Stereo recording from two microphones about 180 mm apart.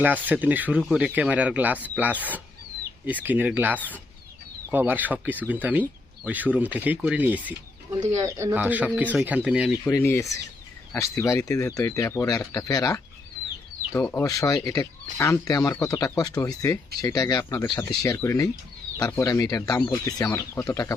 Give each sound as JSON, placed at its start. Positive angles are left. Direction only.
{"t": 0.0, "sound": "speech", "side_deg": -10}
{"t": 9.8, "sound": "speech", "side_deg": 10}